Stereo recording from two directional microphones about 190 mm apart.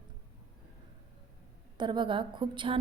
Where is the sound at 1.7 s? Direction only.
25° right (ahead or behind).